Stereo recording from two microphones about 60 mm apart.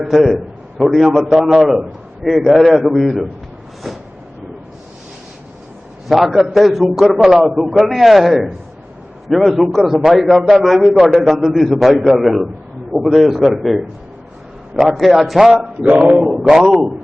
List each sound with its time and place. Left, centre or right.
0.0 s a man's voice: centre
3.9 s vehicle: centre
6.1 s a man's voice: centre
15.6 s a sound: centre
16.0 s a man's voice: centre